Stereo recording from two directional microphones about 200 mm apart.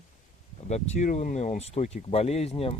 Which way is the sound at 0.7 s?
35° left (ahead or behind).